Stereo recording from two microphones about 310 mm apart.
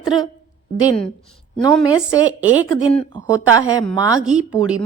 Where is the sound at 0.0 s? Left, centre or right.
Centre.